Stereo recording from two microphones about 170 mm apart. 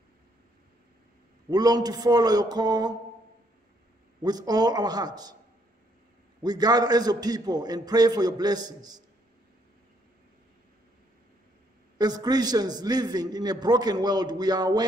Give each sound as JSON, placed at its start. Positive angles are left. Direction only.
{"t": 1.5, "sound": "a man's voice", "side_deg": -25}
{"t": 4.2, "sound": "a man's voice", "side_deg": -25}
{"t": 6.4, "sound": "a man's voice", "side_deg": -25}
{"t": 12.0, "sound": "a man's voice", "side_deg": -25}